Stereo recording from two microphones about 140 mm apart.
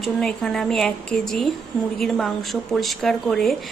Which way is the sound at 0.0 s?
5° left (ahead or behind).